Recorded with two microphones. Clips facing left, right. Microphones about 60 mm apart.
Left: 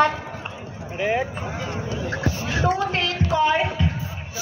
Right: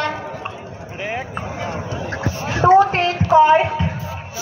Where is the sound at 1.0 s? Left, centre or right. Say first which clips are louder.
Left 4 dB; centre.